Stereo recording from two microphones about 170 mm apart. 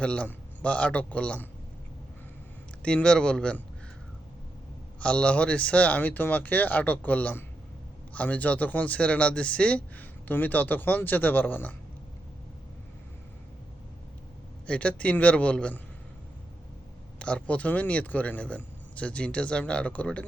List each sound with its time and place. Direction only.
0.0 s speech: 5° left (ahead or behind)
2.8 s speech: 5° left (ahead or behind)
4.9 s speech: 5° left (ahead or behind)
14.7 s speech: 5° left (ahead or behind)
17.2 s speech: 5° left (ahead or behind)